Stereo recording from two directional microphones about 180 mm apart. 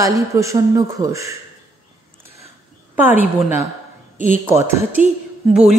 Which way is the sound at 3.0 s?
10° right (ahead or behind).